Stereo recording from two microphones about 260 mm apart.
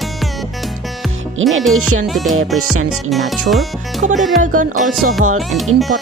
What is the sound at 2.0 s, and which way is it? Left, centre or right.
Speech, centre.